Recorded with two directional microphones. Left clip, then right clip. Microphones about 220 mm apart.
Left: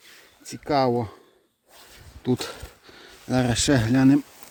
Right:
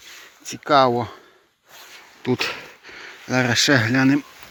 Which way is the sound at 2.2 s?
20° left (ahead or behind).